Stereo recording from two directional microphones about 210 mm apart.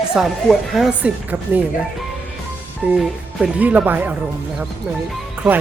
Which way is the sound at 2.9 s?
5° right (ahead or behind).